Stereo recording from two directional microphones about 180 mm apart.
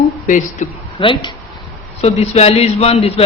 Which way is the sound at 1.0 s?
30° left (ahead or behind).